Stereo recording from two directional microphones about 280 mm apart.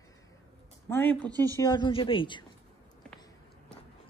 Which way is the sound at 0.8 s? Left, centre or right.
Centre.